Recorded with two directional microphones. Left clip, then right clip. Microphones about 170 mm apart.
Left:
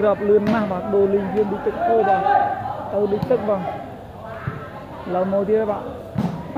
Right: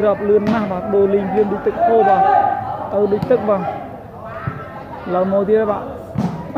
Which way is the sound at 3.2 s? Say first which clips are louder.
Right 4 dB; 20° right (ahead or behind).